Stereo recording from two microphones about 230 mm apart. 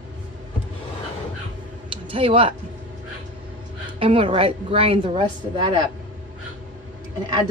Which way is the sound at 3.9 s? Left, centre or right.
Right.